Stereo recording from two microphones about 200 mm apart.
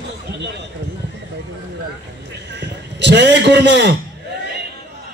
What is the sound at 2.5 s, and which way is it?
A man's voice, 60° right (ahead or behind).